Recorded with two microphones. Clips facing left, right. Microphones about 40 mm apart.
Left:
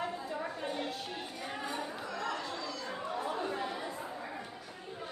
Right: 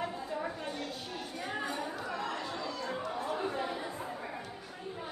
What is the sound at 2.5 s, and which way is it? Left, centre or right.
Chatter, centre.